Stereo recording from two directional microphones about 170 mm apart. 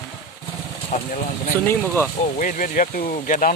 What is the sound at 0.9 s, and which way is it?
Speech, 50° left (ahead or behind).